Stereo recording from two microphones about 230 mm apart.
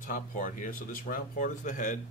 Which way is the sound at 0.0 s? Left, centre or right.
Left.